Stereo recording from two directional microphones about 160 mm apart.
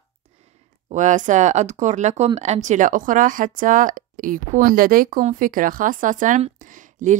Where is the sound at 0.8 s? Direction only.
50° right (ahead or behind).